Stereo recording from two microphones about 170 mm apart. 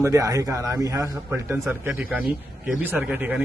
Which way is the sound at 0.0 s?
20° right (ahead or behind).